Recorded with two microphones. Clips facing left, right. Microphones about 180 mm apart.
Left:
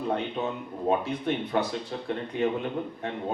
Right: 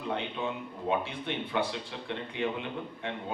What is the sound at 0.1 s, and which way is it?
A man's voice, 40° left (ahead or behind).